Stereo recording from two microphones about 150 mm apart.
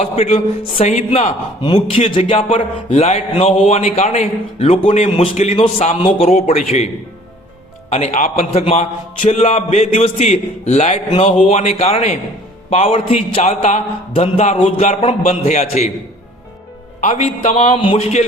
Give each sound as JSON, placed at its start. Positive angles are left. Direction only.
{"t": 0.0, "sound": "a man's voice", "side_deg": 45}
{"t": 1.6, "sound": "a man's voice", "side_deg": 35}
{"t": 7.9, "sound": "a man's voice", "side_deg": 45}
{"t": 8.1, "sound": "a man's voice", "side_deg": 55}
{"t": 17.0, "sound": "a man's voice", "side_deg": 50}